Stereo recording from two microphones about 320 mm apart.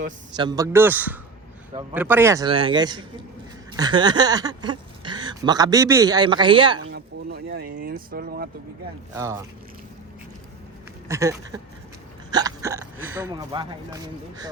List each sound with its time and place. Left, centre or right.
0.3 s speech: centre
6.7 s a sound: right
7.8 s speech: right
9.1 s speech: centre
11.1 s speech: centre